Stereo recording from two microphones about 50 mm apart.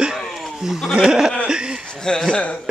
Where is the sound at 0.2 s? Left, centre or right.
Centre.